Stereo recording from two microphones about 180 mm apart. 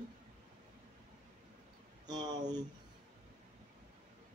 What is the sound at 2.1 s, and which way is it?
Speech, 20° right (ahead or behind).